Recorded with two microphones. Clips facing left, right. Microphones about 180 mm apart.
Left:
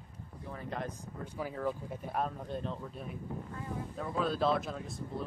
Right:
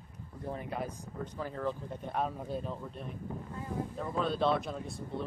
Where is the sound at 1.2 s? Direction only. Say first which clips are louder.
Even; 10° left (ahead or behind).